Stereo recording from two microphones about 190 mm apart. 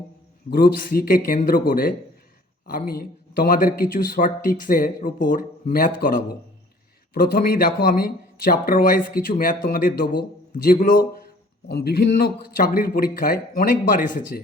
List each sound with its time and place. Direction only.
0.5 s a man's voice: 50° left (ahead or behind)
11.7 s a man's voice: 55° left (ahead or behind)